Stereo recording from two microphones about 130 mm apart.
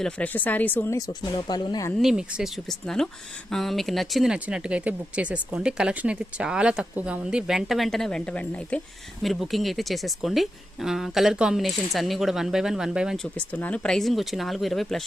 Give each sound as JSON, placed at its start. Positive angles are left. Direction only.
{"t": 0.0, "sound": "speech", "side_deg": 10}
{"t": 0.9, "sound": "speech", "side_deg": 30}
{"t": 2.0, "sound": "speech", "side_deg": -5}
{"t": 13.1, "sound": "speech", "side_deg": 10}